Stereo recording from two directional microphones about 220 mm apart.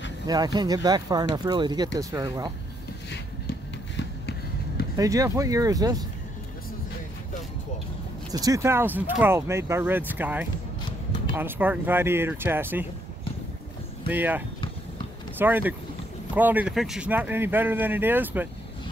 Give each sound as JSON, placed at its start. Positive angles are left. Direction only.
{"t": 0.3, "sound": "speech", "side_deg": -20}
{"t": 3.1, "sound": "basketball bounce", "side_deg": 55}
{"t": 4.9, "sound": "speech", "side_deg": -15}
{"t": 8.3, "sound": "speech", "side_deg": -15}
{"t": 14.0, "sound": "speech", "side_deg": -10}